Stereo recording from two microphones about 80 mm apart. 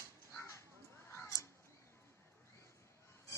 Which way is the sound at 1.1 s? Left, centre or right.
Left.